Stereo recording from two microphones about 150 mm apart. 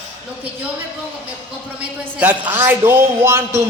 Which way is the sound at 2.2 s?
10° right (ahead or behind).